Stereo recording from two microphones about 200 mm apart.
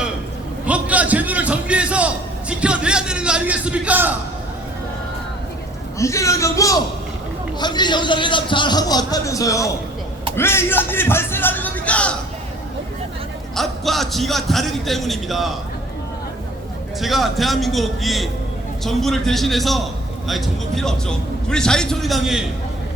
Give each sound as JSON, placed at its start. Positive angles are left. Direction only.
{"t": 0.6, "sound": "a sound", "side_deg": -5}
{"t": 6.0, "sound": "a man's voice", "side_deg": 15}
{"t": 13.6, "sound": "a man's voice", "side_deg": 0}
{"t": 17.0, "sound": "a man's voice", "side_deg": 0}